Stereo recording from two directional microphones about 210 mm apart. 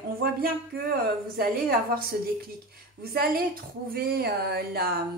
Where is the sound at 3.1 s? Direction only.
45° right (ahead or behind).